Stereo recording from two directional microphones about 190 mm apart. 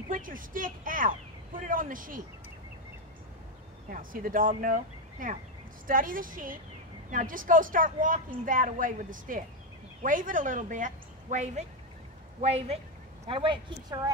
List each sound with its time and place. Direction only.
0.1 s a woman's voice: 45° right (ahead or behind)
3.9 s a woman's voice: 45° right (ahead or behind); by 14.1 s 25° right (ahead or behind)